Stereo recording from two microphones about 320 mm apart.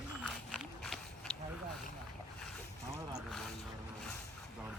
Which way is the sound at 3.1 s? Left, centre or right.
Centre.